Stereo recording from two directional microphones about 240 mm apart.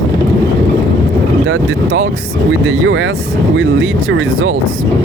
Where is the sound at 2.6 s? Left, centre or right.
Right.